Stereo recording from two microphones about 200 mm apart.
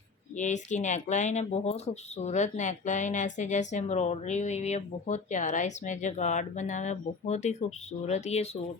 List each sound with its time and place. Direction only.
0.3 s speech: 35° left (ahead or behind)